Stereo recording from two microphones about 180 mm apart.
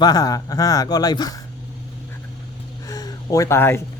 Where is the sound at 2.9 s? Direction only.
20° left (ahead or behind).